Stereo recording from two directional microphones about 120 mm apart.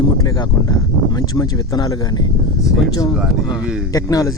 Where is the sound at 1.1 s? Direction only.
30° left (ahead or behind).